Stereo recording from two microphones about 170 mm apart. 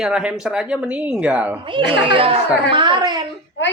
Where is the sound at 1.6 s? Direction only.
30° right (ahead or behind).